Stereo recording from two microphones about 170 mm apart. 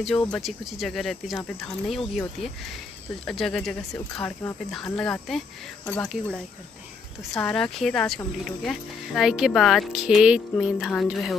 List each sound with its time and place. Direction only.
0.0 s speech: 5° left (ahead or behind)
3.3 s speech: 5° left (ahead or behind)
4.1 s speech: 15° left (ahead or behind)
4.6 s speech: 5° left (ahead or behind)